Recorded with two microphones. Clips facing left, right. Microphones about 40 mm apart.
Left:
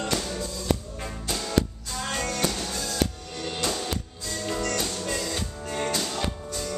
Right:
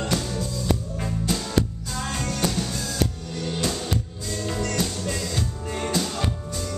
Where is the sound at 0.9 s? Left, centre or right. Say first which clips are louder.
Right 5 dB; centre.